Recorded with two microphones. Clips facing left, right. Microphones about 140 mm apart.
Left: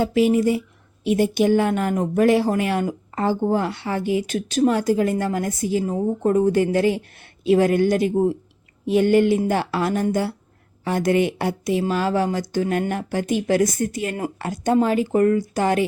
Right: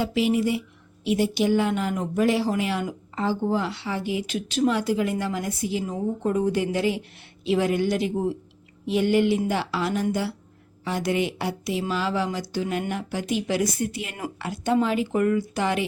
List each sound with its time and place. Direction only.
0.0 s speech: 45° left (ahead or behind)